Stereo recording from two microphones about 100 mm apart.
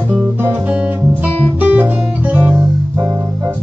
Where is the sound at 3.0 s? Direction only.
25° right (ahead or behind).